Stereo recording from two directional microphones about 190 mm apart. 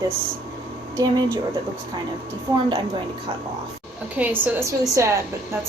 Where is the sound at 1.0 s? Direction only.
15° right (ahead or behind).